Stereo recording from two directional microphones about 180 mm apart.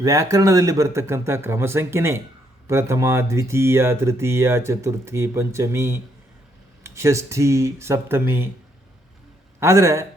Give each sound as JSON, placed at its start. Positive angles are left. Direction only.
{"t": 0.0, "sound": "speech", "side_deg": -20}
{"t": 9.6, "sound": "speech", "side_deg": -15}